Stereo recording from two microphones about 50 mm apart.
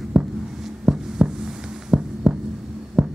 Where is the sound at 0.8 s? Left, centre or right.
Centre.